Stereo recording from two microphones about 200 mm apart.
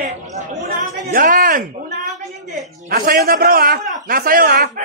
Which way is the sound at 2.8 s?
50° right (ahead or behind).